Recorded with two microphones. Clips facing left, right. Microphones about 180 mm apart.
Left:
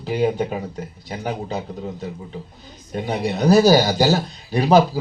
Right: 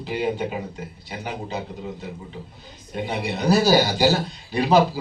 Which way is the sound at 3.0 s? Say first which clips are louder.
Left 4 dB; 40° left (ahead or behind).